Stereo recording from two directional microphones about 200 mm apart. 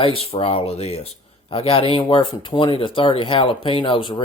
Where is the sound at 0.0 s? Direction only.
30° left (ahead or behind).